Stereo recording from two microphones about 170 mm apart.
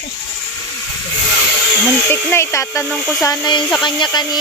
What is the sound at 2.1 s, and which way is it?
Speech, 15° left (ahead or behind).